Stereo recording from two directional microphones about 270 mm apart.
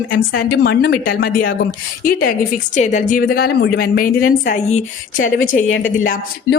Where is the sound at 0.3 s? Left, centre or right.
Left.